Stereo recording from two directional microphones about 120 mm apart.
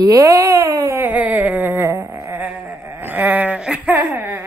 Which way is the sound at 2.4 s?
Centre (ahead or behind).